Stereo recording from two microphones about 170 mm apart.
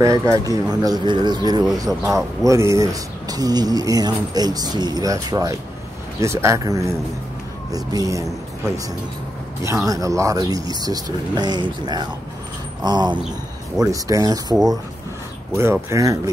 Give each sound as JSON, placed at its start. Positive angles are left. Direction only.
{"t": 0.0, "sound": "speech", "side_deg": -20}
{"t": 9.6, "sound": "speech", "side_deg": -20}